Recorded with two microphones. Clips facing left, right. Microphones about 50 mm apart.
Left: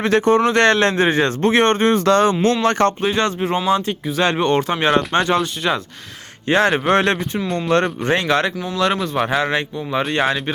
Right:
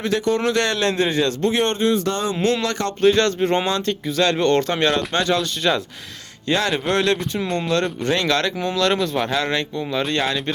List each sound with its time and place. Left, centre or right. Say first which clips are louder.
0.0 s a man's voice: left 5 dB; left
2.4 s a man's voice: left 5 dB; left
3.0 s speech: right 3 dB; centre
6.5 s a man's voice: left 5 dB; left
7.4 s speech: left 1 dB; centre
8.2 s speech: left 2 dB; centre